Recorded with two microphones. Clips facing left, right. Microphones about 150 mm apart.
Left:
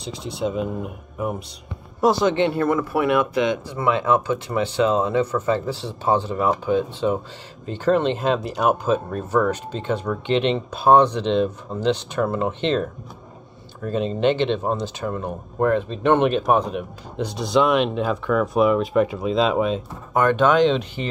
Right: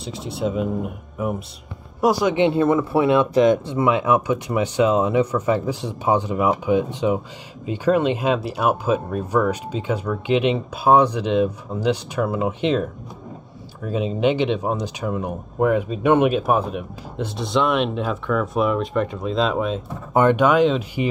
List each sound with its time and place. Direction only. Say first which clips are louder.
0.0 s speech: right 1 dB; 5° right (ahead or behind)
2.0 s speech: even; 10° right (ahead or behind)
13.8 s speech: even; 5° right (ahead or behind)
20.2 s speech: right 2 dB; 20° right (ahead or behind)
20.4 s speech: even; 5° right (ahead or behind)